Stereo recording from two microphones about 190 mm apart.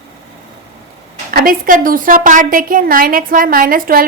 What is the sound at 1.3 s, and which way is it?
A woman's voice, 50° right (ahead or behind).